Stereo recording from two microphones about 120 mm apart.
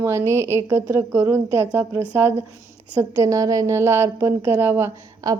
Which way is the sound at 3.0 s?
25° right (ahead or behind).